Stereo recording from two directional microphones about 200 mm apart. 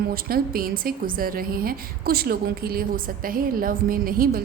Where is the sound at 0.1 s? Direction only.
50° right (ahead or behind).